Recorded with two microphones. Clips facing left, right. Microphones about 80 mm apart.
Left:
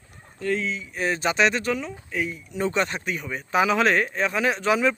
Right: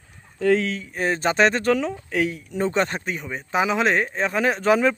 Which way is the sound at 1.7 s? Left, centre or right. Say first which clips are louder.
Right 6 dB; right.